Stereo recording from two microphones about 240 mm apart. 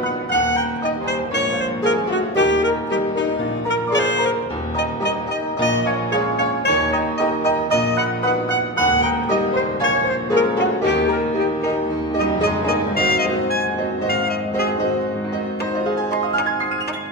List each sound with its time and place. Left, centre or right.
1.9 s music: left
3.9 s saxophone: left
6.6 s music: left
9.6 s music: left
12.2 s music: left